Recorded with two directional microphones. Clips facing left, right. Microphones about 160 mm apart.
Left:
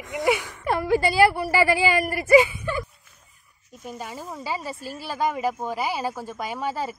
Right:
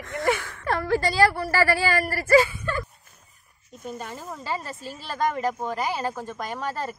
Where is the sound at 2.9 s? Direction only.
45° right (ahead or behind).